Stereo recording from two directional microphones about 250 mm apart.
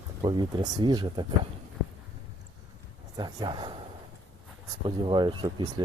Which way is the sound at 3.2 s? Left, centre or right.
Centre.